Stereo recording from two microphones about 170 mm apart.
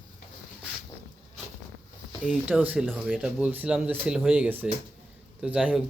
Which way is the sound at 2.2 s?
10° right (ahead or behind).